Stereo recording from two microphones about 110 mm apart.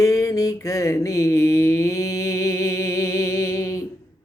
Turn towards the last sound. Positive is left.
turn(degrees=30)  # may be behind; listen again after turning